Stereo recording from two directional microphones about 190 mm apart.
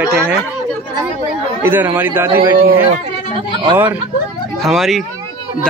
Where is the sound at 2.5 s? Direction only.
50° right (ahead or behind).